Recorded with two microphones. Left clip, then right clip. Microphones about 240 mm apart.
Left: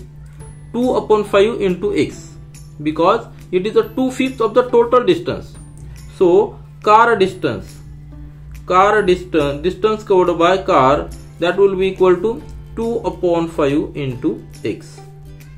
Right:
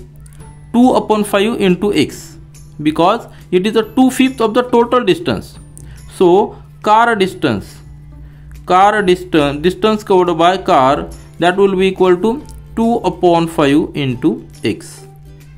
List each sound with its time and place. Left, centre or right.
0.7 s speech: right
8.6 s speech: right